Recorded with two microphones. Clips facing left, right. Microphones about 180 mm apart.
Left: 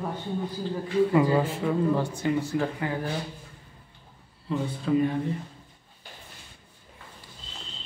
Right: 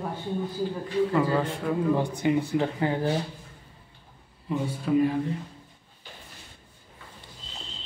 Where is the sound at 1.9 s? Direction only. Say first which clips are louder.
Right 2 dB; 15° right (ahead or behind).